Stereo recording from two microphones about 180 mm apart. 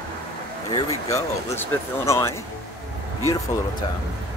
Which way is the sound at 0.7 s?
15° left (ahead or behind).